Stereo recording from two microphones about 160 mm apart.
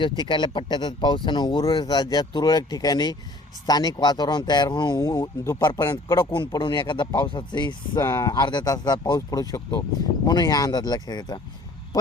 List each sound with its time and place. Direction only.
0.2 s speech: 30° left (ahead or behind)